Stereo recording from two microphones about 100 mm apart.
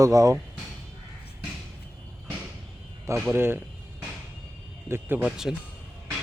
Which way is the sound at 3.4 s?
25° right (ahead or behind).